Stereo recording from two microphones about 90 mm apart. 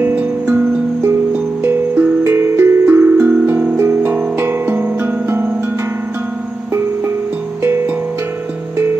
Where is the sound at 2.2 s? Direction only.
30° right (ahead or behind).